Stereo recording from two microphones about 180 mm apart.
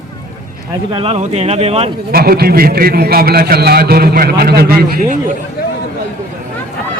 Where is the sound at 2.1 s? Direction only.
55° right (ahead or behind).